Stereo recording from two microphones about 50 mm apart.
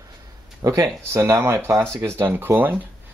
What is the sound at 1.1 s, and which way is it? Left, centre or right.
Speech, right.